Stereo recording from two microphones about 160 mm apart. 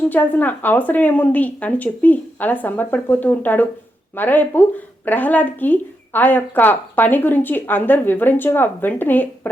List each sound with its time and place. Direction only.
0.1 s speech: 10° left (ahead or behind)